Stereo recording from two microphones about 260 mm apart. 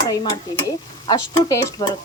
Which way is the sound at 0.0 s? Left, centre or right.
Centre.